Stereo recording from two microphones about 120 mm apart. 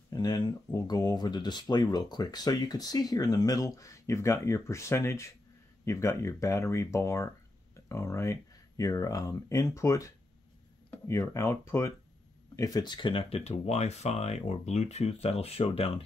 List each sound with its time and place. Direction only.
0.1 s speech: 35° left (ahead or behind); by 15.9 s 55° left (ahead or behind)